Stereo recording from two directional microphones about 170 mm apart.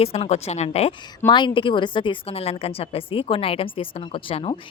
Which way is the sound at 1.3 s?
25° left (ahead or behind).